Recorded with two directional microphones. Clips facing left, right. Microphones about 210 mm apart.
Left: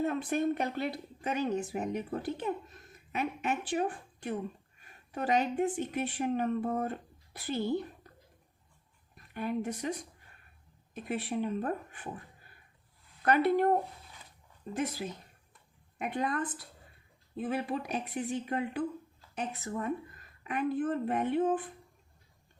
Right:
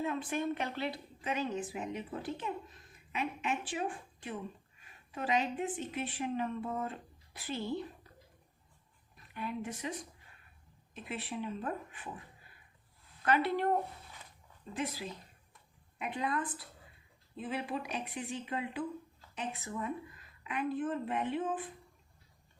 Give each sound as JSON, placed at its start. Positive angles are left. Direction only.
{"t": 0.0, "sound": "a woman's voice", "side_deg": 40}
{"t": 9.3, "sound": "speech", "side_deg": 50}
{"t": 10.9, "sound": "speech", "side_deg": 45}
{"t": 13.2, "sound": "a woman's voice", "side_deg": 45}